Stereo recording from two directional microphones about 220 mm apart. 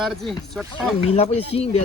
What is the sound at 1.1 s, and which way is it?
Speech, 30° left (ahead or behind).